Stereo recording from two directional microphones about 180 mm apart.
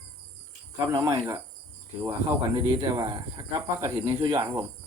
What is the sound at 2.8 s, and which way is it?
Speech, 20° right (ahead or behind).